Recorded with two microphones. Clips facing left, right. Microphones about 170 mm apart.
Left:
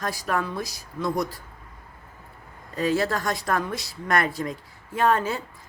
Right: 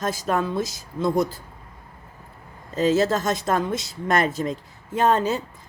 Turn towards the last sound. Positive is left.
turn(degrees=-20)  # may be behind; listen again after turning